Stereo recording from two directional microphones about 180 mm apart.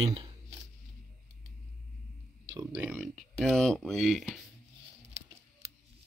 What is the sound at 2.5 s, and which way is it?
Speech, 10° right (ahead or behind).